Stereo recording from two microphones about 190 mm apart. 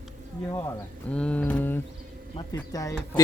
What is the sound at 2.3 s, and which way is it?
Speech, 20° left (ahead or behind).